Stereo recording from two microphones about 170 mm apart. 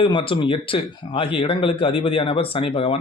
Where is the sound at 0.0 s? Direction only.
30° left (ahead or behind).